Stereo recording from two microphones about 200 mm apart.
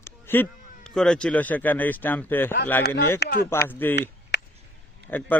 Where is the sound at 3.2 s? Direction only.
50° left (ahead or behind).